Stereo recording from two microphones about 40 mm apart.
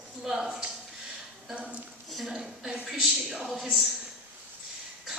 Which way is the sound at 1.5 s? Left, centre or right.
Right.